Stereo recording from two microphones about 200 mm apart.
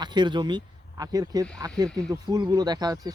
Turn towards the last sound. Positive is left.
turn(degrees=-20)  # may be behind; listen again after turning